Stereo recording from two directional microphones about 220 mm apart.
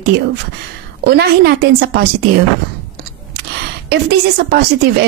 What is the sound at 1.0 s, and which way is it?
A woman's voice, 45° right (ahead or behind).